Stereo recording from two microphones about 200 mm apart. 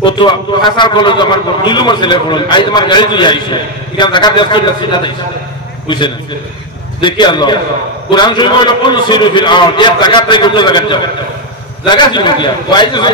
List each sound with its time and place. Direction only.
0.0 s a man's voice: 20° left (ahead or behind)